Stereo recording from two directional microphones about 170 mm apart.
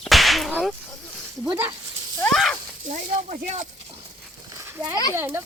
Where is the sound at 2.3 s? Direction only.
Centre (ahead or behind).